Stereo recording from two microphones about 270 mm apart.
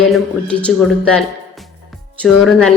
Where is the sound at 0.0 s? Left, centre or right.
Centre.